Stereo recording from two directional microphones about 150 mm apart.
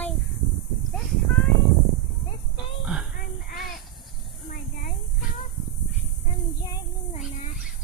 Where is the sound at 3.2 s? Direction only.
75° left (ahead or behind).